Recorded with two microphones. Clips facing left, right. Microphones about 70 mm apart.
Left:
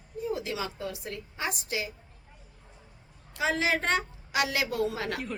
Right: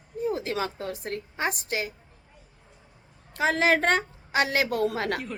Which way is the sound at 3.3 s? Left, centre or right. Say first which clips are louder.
Right 5 dB; right.